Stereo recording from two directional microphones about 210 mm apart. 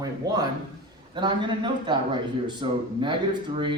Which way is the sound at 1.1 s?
20° right (ahead or behind).